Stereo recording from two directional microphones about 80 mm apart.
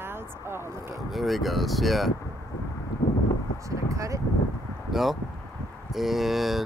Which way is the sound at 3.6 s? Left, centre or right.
Right.